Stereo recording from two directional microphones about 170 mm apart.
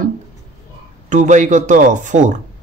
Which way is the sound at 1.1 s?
45° right (ahead or behind).